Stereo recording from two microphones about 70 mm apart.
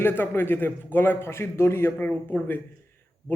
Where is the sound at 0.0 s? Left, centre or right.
Left.